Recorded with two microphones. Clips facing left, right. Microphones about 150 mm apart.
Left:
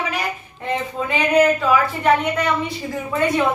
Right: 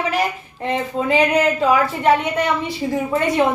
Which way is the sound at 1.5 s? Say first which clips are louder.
Right 2 dB; 30° right (ahead or behind).